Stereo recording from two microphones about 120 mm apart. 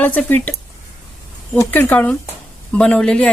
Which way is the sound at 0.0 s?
15° left (ahead or behind).